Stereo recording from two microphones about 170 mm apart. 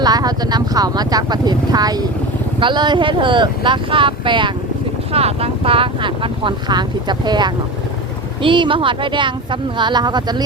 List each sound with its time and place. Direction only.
0.0 s speech: 25° right (ahead or behind)